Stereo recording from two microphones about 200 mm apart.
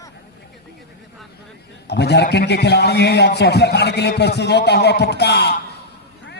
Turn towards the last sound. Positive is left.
turn(degrees=55)  # may be behind; listen again after turning